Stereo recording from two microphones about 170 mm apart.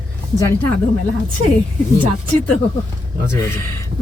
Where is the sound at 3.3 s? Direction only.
15° left (ahead or behind).